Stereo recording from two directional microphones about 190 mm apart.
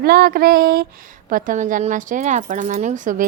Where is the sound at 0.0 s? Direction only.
50° right (ahead or behind).